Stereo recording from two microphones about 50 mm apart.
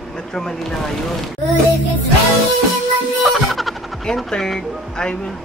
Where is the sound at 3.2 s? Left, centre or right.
Centre.